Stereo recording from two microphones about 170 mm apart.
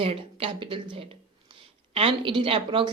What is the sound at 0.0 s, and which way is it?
Speech, 35° right (ahead or behind).